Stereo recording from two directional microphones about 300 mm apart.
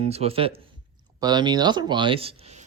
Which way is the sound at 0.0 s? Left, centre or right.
Centre.